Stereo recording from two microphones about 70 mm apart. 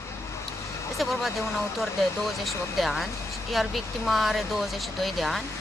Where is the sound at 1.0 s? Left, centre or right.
Centre.